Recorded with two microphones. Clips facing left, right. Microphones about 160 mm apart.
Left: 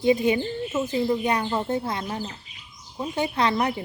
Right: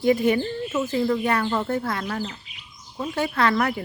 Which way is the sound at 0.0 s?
20° left (ahead or behind).